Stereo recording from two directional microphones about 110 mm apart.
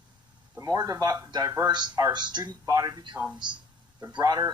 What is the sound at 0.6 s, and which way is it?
Speech, 35° right (ahead or behind).